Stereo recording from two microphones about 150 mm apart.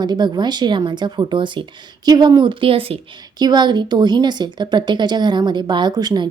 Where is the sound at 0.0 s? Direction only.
30° right (ahead or behind).